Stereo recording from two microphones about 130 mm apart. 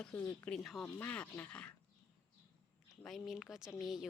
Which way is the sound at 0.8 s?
15° left (ahead or behind).